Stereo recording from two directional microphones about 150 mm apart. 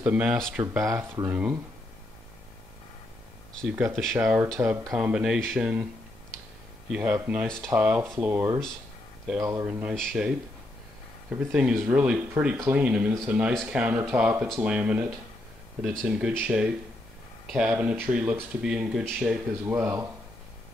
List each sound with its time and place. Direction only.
0.0 s speech: 10° right (ahead or behind)
3.7 s speech: 10° right (ahead or behind)
6.9 s speech: 10° right (ahead or behind)
7.4 s speech: 5° left (ahead or behind)
7.7 s speech: 10° right (ahead or behind)
15.8 s speech: 5° left (ahead or behind)
16.1 s speech: 5° right (ahead or behind)